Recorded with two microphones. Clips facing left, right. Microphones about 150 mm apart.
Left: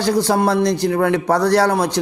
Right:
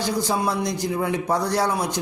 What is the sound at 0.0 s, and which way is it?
A man's voice, 70° left (ahead or behind).